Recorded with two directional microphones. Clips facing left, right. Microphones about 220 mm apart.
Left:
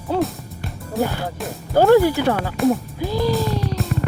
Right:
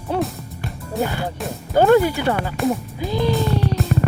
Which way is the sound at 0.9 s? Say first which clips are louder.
Left 1 dB; centre (ahead or behind).